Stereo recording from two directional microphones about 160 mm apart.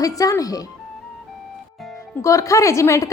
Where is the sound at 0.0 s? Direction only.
20° left (ahead or behind).